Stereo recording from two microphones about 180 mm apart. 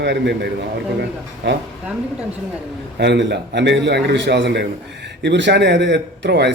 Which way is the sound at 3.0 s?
70° right (ahead or behind).